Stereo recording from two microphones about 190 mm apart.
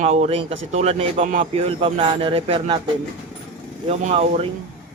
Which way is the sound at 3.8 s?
30° right (ahead or behind).